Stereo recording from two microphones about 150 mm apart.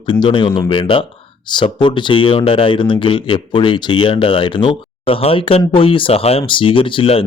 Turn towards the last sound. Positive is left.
turn(degrees=40)  # may be behind; listen again after turning